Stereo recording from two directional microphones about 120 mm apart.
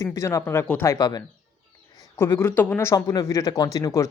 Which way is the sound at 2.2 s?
20° left (ahead or behind).